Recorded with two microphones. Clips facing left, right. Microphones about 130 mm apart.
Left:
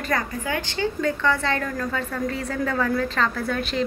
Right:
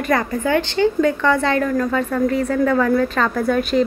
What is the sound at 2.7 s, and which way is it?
A woman's voice, 45° right (ahead or behind).